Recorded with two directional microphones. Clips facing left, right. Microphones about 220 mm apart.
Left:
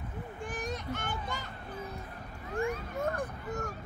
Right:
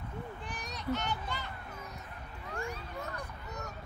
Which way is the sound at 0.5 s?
50° left (ahead or behind).